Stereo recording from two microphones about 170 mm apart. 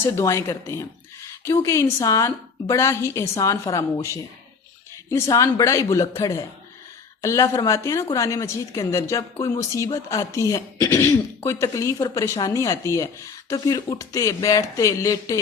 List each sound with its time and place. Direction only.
0.0 s a woman's voice: 15° left (ahead or behind)